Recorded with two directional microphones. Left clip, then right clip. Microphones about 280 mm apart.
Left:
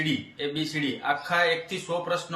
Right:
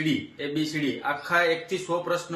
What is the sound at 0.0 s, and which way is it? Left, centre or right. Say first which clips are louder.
Speech: even; centre.